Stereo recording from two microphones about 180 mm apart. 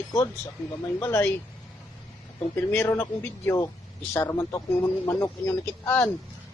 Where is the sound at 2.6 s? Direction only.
15° left (ahead or behind).